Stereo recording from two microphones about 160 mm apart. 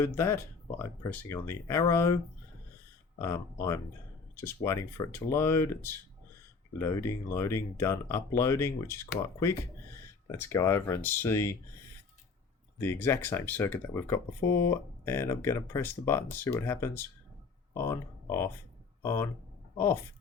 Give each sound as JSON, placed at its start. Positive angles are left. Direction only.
{"t": 0.0, "sound": "speech", "side_deg": 15}
{"t": 3.2, "sound": "speech", "side_deg": 20}
{"t": 12.8, "sound": "speech", "side_deg": 15}